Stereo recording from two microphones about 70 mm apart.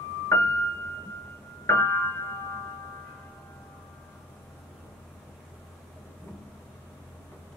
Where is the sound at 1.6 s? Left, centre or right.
Left.